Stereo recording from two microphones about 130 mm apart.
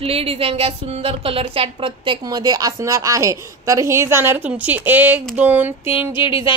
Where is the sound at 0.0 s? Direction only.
50° right (ahead or behind); by 5.2 s 15° right (ahead or behind).